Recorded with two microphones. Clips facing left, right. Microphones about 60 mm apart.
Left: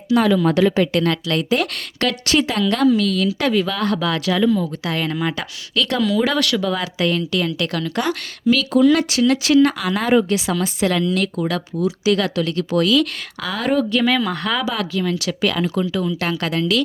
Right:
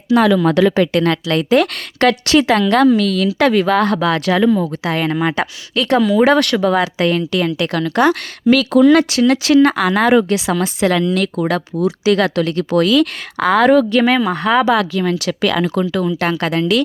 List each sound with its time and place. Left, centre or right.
0.1 s speech: right
0.9 s a woman's voice: right
2.2 s speech: right
4.9 s speech: right
5.8 s speech: right
6.1 s a woman's voice: right
11.4 s speech: right
12.7 s a woman's voice: right
13.6 s speech: right
13.9 s speech: right
14.2 s speech: right
14.7 s speech: right
15.0 s a woman's voice: right
15.4 s a woman's voice: right